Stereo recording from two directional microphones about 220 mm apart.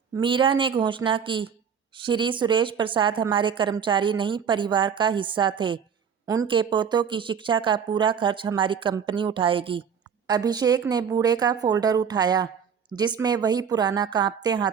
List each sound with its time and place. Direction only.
0.1 s a woman's voice: 20° right (ahead or behind)